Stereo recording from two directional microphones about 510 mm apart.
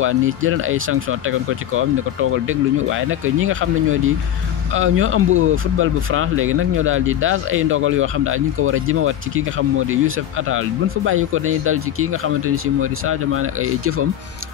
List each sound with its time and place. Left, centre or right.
0.0 s speech: right
2.9 s speech: right
11.1 s speech: right